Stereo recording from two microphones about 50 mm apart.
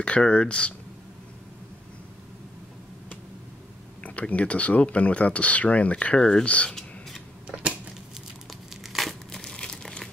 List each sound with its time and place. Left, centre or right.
0.2 s speech: left
4.0 s speech: left
8.8 s crumpling: centre
9.4 s crumpling: centre